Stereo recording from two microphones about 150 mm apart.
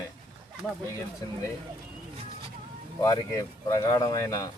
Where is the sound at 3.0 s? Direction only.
20° left (ahead or behind).